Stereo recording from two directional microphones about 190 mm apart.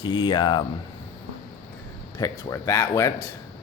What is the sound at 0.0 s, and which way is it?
Speech, 25° left (ahead or behind).